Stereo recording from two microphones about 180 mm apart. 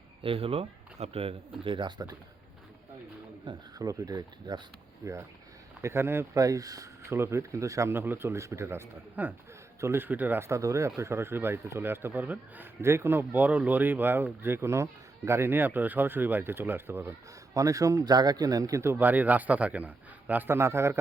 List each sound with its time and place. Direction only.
0.2 s speech: 30° right (ahead or behind)
3.4 s speech: 20° right (ahead or behind)